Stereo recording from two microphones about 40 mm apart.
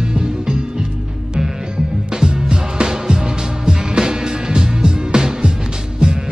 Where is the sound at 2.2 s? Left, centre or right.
Right.